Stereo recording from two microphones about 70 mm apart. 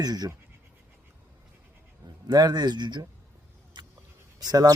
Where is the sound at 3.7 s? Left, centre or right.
Right.